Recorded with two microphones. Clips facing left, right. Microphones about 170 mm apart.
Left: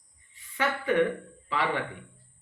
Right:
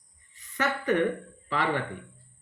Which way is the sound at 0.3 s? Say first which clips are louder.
Even; 45° right (ahead or behind).